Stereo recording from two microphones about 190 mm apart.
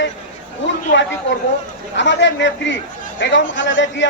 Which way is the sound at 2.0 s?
70° left (ahead or behind).